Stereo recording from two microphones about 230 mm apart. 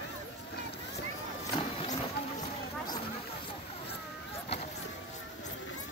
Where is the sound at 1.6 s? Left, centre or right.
Centre.